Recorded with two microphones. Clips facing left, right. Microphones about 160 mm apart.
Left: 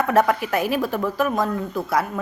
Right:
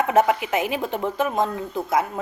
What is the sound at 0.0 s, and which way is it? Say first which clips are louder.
Speech: even; 20° right (ahead or behind).